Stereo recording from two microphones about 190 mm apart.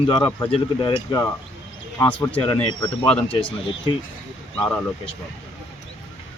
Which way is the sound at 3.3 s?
25° left (ahead or behind).